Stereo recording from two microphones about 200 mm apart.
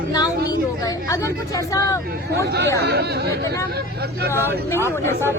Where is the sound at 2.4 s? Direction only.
55° right (ahead or behind).